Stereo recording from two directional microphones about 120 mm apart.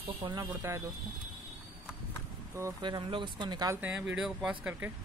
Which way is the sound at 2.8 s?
40° right (ahead or behind).